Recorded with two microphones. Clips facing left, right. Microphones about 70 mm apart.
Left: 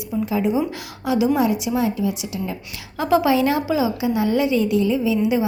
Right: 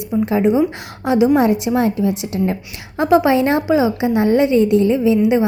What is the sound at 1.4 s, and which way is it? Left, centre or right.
A woman's voice, right.